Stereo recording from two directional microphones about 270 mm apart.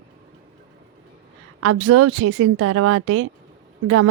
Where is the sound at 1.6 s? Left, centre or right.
Right.